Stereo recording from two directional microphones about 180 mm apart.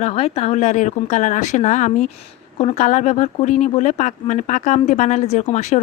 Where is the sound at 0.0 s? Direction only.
35° left (ahead or behind).